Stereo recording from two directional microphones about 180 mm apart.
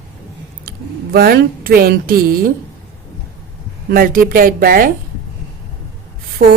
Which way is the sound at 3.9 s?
55° right (ahead or behind).